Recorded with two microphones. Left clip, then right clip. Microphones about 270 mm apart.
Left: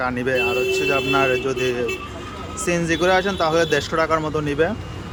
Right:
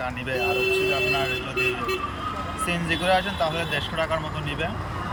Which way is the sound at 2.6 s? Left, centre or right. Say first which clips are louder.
Left 6 dB; centre.